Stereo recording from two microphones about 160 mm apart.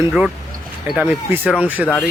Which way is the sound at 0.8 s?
Centre (ahead or behind).